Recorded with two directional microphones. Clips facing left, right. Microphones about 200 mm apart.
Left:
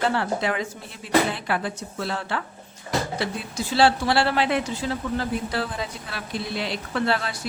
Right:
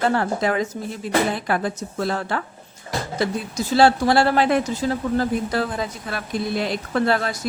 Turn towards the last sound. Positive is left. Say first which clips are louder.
# right 4 dB
turn(degrees=-45)  # may be behind; listen again after turning